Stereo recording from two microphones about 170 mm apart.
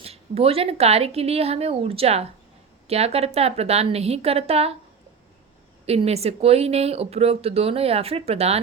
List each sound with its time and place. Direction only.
0.0 s speech: 35° right (ahead or behind)
5.8 s speech: 35° right (ahead or behind)